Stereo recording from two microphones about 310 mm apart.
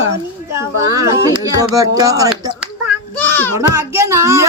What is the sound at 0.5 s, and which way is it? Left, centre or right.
Speech, centre.